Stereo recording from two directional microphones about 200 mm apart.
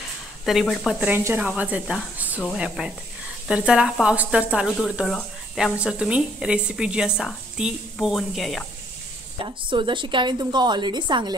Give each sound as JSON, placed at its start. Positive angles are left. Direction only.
{"t": 0.5, "sound": "speech", "side_deg": 0}
{"t": 9.4, "sound": "a woman's voice", "side_deg": -25}